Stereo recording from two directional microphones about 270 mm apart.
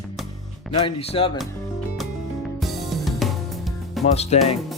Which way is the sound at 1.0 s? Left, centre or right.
Left.